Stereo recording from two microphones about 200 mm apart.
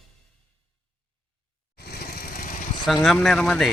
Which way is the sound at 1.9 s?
50° left (ahead or behind).